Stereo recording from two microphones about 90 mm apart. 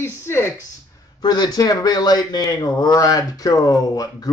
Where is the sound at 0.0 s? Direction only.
25° left (ahead or behind).